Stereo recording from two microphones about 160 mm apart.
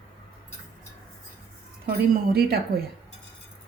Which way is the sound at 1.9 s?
70° right (ahead or behind).